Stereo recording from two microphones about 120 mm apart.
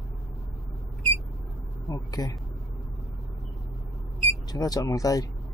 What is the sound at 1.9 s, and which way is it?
Speech, 30° left (ahead or behind).